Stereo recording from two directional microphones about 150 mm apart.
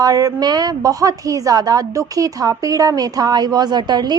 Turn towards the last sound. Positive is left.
turn(degrees=-30)  # may be behind; listen again after turning